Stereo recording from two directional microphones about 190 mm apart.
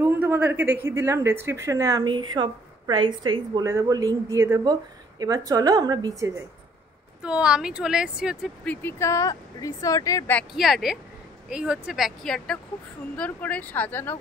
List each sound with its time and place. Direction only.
0.0 s speech: 10° right (ahead or behind)
7.2 s speech: 5° right (ahead or behind)
8.6 s speech: 15° left (ahead or behind)
10.5 s speech: centre (ahead or behind)